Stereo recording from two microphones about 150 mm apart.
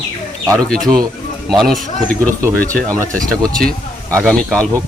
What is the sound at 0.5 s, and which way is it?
A man's voice, 5° left (ahead or behind).